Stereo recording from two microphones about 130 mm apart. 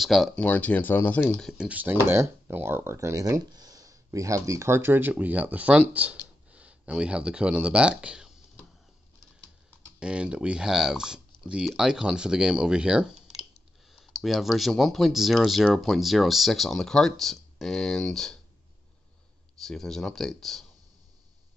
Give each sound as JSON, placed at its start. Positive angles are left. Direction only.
{"t": 0.0, "sound": "speech", "side_deg": 0}
{"t": 0.4, "sound": "speech", "side_deg": 10}
{"t": 1.6, "sound": "speech", "side_deg": -10}
{"t": 9.9, "sound": "speech", "side_deg": -5}
{"t": 14.1, "sound": "speech", "side_deg": 0}
{"t": 19.6, "sound": "speech", "side_deg": 5}